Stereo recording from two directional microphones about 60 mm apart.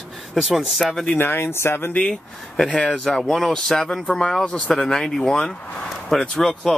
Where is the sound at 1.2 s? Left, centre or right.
Left.